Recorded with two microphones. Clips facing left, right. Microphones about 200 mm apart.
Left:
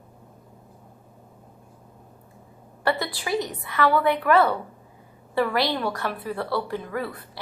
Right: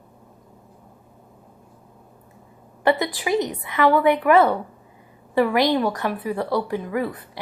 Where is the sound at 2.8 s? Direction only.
15° right (ahead or behind).